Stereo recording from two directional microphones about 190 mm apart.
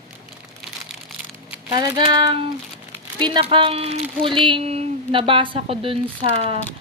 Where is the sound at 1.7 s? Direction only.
20° right (ahead or behind).